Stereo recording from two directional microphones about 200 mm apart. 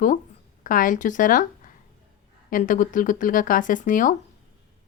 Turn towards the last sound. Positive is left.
turn(degrees=40)  # may be behind; listen again after turning